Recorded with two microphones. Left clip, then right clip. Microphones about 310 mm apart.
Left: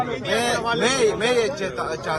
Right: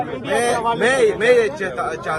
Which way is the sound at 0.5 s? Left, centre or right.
Centre.